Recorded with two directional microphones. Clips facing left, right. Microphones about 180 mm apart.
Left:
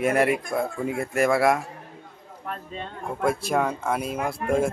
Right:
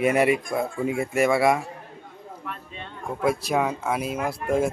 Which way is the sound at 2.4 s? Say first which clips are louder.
Left 6 dB; 40° left (ahead or behind).